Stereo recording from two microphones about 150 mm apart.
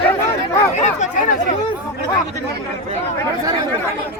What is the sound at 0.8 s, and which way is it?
Chatter, 55° left (ahead or behind).